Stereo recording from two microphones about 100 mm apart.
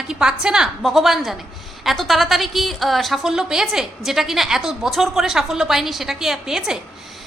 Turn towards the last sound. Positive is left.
turn(degrees=-5)  # may be behind; listen again after turning